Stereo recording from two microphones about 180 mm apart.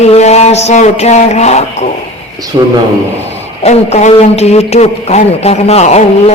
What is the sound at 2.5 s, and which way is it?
Speech, 30° right (ahead or behind).